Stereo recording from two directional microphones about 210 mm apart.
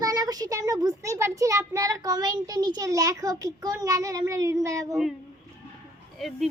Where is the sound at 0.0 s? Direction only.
20° right (ahead or behind).